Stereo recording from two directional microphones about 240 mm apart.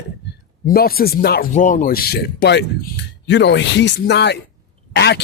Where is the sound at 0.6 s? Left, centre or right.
Left.